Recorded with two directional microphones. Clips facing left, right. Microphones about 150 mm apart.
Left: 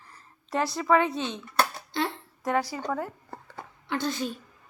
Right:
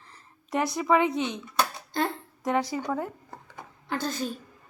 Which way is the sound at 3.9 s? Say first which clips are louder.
Left 1 dB; 40° right (ahead or behind).